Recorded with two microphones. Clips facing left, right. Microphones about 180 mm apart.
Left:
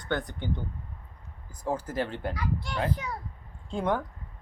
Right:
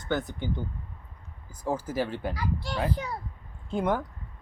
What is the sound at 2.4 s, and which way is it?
Speech, 35° right (ahead or behind).